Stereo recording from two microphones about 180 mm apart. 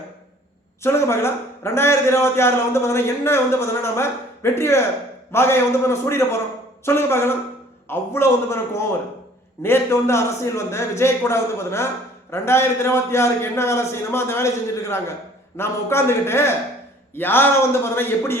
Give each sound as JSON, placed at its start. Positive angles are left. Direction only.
{"t": 0.8, "sound": "a man's voice", "side_deg": 15}